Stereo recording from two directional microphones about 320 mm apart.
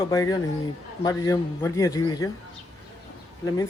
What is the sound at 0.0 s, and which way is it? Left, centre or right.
A man's voice, centre.